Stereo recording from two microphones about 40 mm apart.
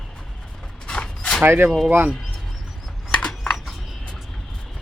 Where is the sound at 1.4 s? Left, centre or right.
Right.